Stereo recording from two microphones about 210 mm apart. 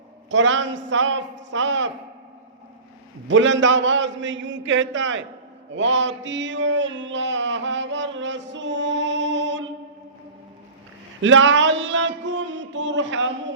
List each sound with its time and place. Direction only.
0.3 s music: 60° right (ahead or behind)
3.2 s music: 65° right (ahead or behind)
5.7 s a sound: 60° right (ahead or behind)
11.2 s music: 65° right (ahead or behind)